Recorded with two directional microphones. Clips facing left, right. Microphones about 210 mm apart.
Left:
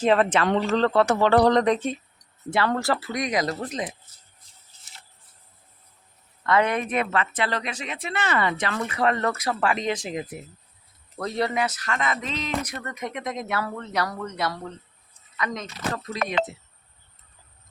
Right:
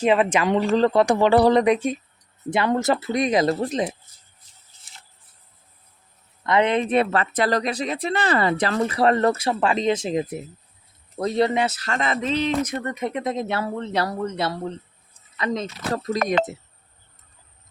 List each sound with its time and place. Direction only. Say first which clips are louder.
0.0 s speech: right 1 dB; 10° right (ahead or behind); by 3.9 s 25° right (ahead or behind)
6.4 s speech: right 3 dB; 20° right (ahead or behind); by 9.3 s 35° right (ahead or behind)
9.3 s speech: right 3 dB; 25° right (ahead or behind); by 16.5 s 45° right (ahead or behind)